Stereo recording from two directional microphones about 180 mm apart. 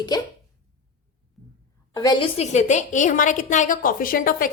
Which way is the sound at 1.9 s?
25° left (ahead or behind).